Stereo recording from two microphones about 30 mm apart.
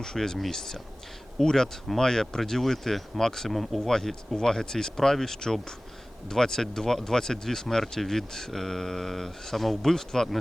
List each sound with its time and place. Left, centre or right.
0.0 s speech: centre